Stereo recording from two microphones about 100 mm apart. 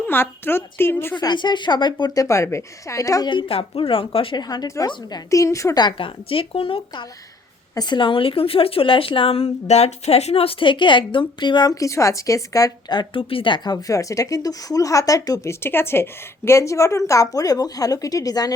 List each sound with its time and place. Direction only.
0.1 s a woman's voice: 20° left (ahead or behind)
1.1 s a woman's voice: 50° left (ahead or behind)
3.2 s speech: 60° left (ahead or behind)
4.4 s a woman's voice: 45° left (ahead or behind)
5.8 s speech: 60° left (ahead or behind)
7.8 s speech: 50° left (ahead or behind)
13.8 s a woman's voice: 35° left (ahead or behind)
15.6 s a woman's voice: 25° left (ahead or behind); by 18.5 s 40° left (ahead or behind)